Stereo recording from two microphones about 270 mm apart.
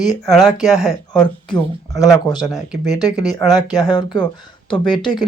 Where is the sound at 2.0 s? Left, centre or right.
Centre.